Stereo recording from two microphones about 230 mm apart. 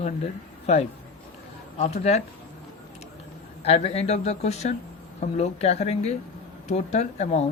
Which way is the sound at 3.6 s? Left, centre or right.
Left.